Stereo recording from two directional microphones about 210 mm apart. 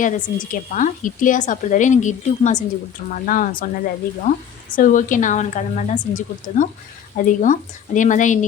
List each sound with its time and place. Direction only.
0.0 s a woman's voice: 40° left (ahead or behind)
4.7 s a woman's voice: 40° left (ahead or behind)